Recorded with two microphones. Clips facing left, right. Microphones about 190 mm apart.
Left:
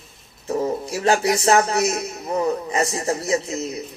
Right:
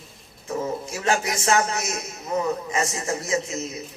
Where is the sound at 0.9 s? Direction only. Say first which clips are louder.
Left 7 dB; 35° left (ahead or behind).